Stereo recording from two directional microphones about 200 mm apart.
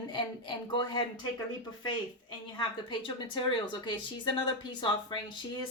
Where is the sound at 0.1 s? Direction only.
25° left (ahead or behind).